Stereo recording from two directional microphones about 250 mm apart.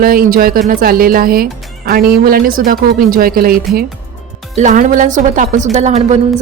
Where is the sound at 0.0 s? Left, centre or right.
Right.